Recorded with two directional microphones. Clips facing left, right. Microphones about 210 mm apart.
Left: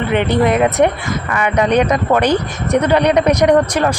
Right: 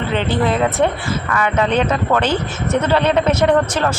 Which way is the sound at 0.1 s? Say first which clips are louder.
Left 4 dB; 15° left (ahead or behind).